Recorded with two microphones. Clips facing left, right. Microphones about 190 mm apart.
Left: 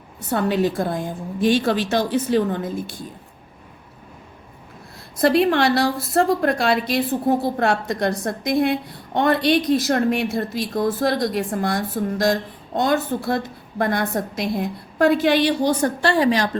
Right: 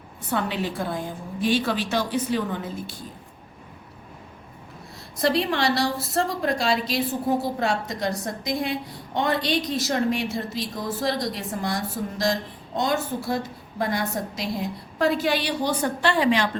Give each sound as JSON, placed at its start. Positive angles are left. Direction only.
{"t": 0.3, "sound": "a woman's voice", "side_deg": 45}
{"t": 5.2, "sound": "a woman's voice", "side_deg": 55}